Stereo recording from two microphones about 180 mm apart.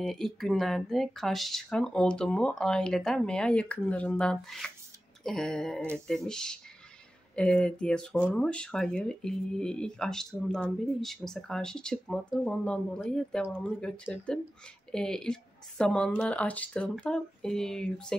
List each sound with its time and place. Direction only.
0.0 s speech: centre (ahead or behind)